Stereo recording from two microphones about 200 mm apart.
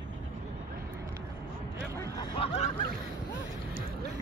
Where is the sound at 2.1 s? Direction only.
25° left (ahead or behind).